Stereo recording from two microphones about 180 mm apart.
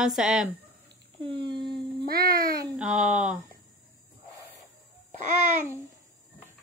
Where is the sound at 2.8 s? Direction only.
5° right (ahead or behind).